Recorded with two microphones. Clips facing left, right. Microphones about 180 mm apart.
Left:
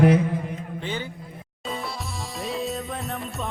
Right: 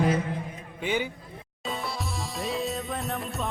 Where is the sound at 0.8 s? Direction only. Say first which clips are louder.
Right 5 dB; 15° right (ahead or behind).